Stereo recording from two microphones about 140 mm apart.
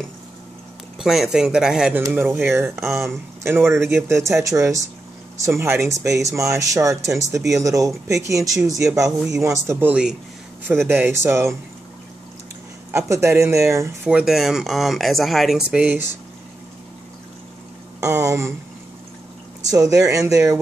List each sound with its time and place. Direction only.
0.9 s speech: centre (ahead or behind); by 2.8 s 20° right (ahead or behind)
2.8 s speech: centre (ahead or behind)
3.4 s speech: 15° right (ahead or behind)
12.9 s speech: 20° right (ahead or behind)
14.0 s speech: centre (ahead or behind)
18.0 s speech: 20° right (ahead or behind)
19.7 s speech: 25° right (ahead or behind)